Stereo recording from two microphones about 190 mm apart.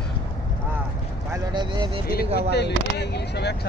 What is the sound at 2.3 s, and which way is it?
Speech, 60° left (ahead or behind).